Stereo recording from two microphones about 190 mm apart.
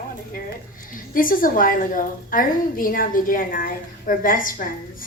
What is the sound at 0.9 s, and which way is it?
A woman's voice, 45° left (ahead or behind).